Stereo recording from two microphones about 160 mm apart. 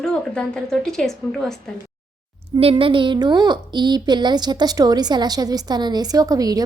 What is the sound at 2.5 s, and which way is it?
A woman's voice, 35° right (ahead or behind).